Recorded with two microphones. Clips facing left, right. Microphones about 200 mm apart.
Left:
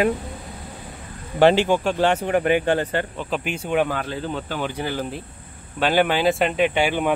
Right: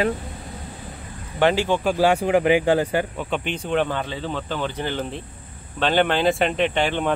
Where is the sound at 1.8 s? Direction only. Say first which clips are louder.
Right 1 dB; 5° right (ahead or behind).